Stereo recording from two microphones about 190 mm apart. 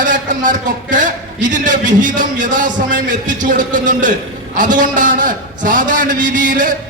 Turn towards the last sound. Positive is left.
turn(degrees=-45)  # may be behind; listen again after turning